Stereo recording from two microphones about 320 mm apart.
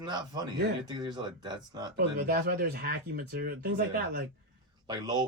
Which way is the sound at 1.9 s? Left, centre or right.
Right.